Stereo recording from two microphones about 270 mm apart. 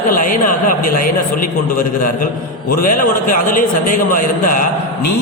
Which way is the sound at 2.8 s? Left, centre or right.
Left.